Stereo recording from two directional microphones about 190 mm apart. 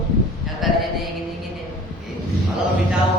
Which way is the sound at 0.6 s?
Centre (ahead or behind).